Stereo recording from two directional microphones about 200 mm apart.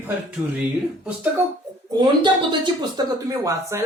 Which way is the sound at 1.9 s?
20° right (ahead or behind).